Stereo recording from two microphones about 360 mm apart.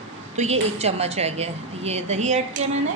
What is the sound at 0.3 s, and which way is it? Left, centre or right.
A woman's voice, centre.